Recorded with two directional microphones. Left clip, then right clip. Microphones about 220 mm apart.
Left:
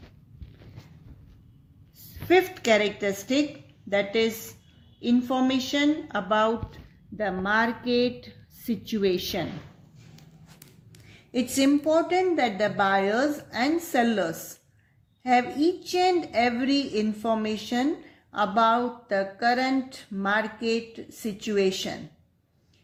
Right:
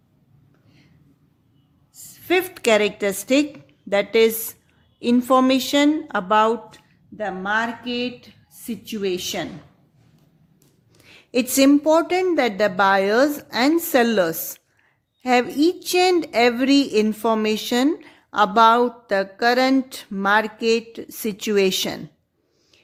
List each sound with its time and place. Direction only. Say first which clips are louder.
2.3 s a woman's voice: right 3 dB; 50° right (ahead or behind)
7.2 s a woman's voice: right 2 dB; 5° right (ahead or behind)
11.1 s a woman's voice: right 7 dB; 55° right (ahead or behind)